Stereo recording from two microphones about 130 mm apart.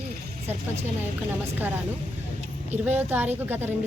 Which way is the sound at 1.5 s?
15° right (ahead or behind).